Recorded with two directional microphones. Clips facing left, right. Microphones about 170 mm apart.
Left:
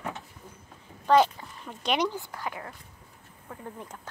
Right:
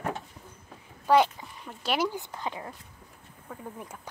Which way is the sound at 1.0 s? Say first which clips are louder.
Left 1 dB; 10° right (ahead or behind).